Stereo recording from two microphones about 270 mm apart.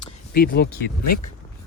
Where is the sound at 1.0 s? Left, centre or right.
Left.